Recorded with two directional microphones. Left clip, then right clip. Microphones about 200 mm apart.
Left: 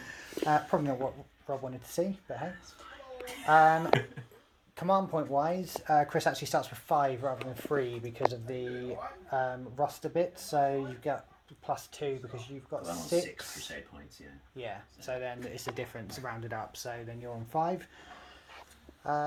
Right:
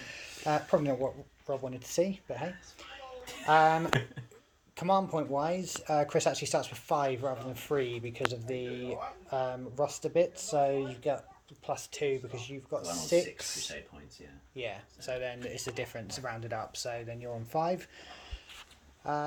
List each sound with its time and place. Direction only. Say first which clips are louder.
0.0 s a sound: left 2 dB; centre (ahead or behind)
0.9 s speech: right 2 dB; 10° right (ahead or behind)
19.1 s speech: left 2 dB; 5° right (ahead or behind)